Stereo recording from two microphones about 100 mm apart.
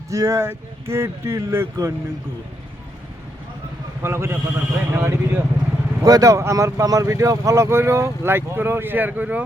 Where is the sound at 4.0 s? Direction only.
25° right (ahead or behind).